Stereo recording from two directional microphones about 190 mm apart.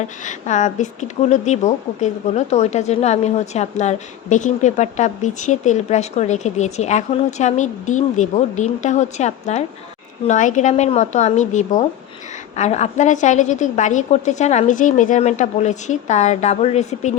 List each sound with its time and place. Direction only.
0.0 s speech: 40° left (ahead or behind)